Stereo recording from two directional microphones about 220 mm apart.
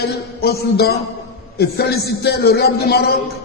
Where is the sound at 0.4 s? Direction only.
45° left (ahead or behind).